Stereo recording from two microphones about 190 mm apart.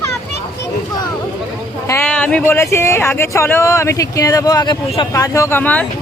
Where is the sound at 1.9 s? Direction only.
10° left (ahead or behind).